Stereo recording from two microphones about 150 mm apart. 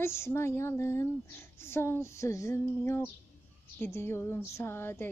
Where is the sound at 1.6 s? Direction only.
15° left (ahead or behind).